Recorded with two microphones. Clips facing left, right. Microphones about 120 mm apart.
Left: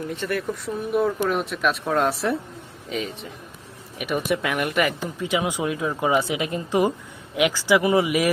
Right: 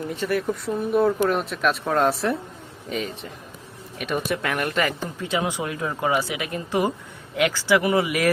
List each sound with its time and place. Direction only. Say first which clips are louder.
0.1 s speech: right 4 dB; centre (ahead or behind); by 8.3 s 20° left (ahead or behind)